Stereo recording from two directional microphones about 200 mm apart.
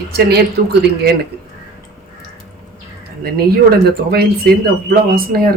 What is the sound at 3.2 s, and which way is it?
Speech, 50° right (ahead or behind).